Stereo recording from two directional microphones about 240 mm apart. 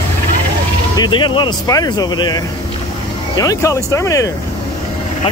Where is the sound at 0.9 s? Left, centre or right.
Centre.